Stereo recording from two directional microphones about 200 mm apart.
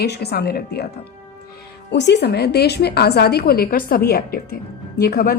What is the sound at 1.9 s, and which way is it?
A woman's voice, 60° left (ahead or behind).